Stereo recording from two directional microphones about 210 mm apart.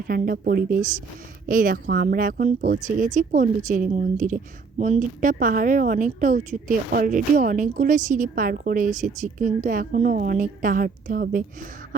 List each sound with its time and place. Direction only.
0.1 s a woman's voice: 45° right (ahead or behind)